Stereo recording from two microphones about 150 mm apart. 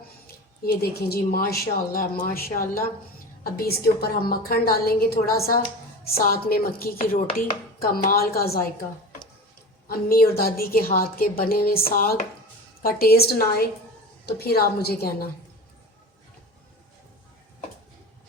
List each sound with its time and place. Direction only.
0.3 s speech: 90° left; by 2.9 s 70° left (ahead or behind)
3.4 s a woman's voice: 90° left
9.9 s a woman's voice: 85° left